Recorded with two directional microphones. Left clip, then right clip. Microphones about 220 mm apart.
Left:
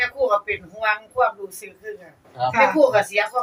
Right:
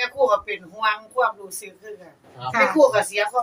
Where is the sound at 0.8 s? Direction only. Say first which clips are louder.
Right 1 dB; 5° right (ahead or behind).